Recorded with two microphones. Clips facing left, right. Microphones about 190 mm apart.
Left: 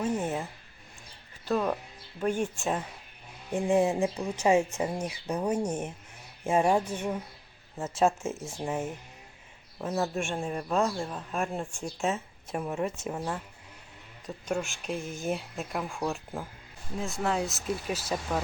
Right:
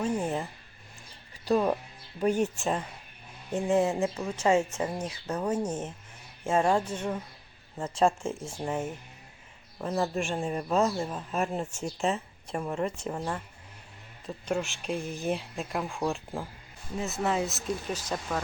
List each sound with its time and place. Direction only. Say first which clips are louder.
0.0 s speech: even; 5° left (ahead or behind)
1.5 s speech: right 3 dB; 10° right (ahead or behind)
3.5 s speech: left 1 dB; 15° left (ahead or behind)
14.4 s speech: right 1 dB; centre (ahead or behind)